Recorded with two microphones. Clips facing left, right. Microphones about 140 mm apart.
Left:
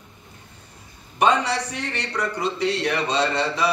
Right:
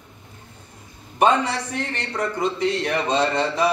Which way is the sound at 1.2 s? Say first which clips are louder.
Right 1 dB; 50° right (ahead or behind).